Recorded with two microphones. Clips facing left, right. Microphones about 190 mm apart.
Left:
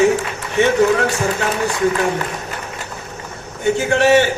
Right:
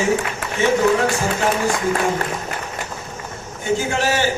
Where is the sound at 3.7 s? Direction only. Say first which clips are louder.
Left 6 dB; 65° left (ahead or behind).